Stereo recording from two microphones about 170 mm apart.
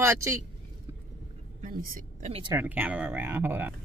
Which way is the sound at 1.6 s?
55° right (ahead or behind).